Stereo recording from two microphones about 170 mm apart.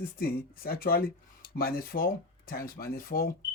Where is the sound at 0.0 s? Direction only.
60° left (ahead or behind).